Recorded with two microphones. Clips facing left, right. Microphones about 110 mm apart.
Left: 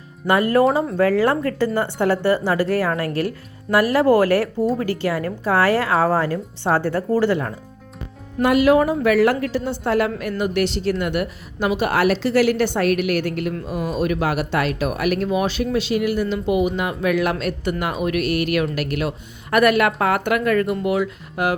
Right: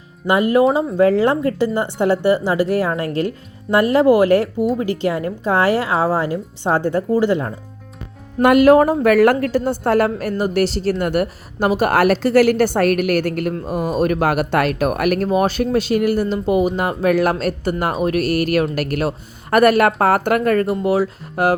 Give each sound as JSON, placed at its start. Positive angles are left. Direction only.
{"t": 0.3, "sound": "speech", "side_deg": -20}
{"t": 8.4, "sound": "a woman's voice", "side_deg": -55}